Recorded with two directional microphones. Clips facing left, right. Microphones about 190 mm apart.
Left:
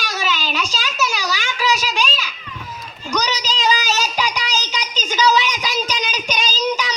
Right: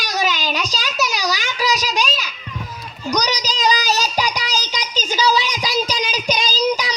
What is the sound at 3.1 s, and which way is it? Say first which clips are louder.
Child singing: right 1 dB; 40° right (ahead or behind).